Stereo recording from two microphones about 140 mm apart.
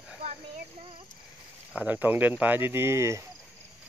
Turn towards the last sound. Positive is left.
turn(degrees=-20)  # may be behind; listen again after turning